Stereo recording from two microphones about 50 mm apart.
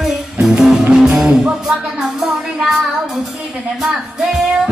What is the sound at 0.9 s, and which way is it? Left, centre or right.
Music, centre.